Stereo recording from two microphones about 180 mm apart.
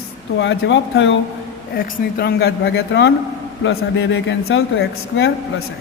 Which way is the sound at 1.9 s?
60° left (ahead or behind).